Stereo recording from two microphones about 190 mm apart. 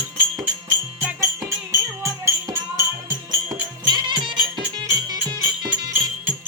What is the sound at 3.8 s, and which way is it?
Music, 25° right (ahead or behind).